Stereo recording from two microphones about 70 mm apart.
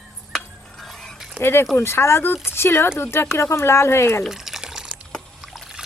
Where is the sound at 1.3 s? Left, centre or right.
Left.